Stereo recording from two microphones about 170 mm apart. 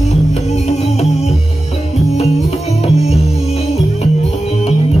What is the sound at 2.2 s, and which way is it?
Music, 40° left (ahead or behind).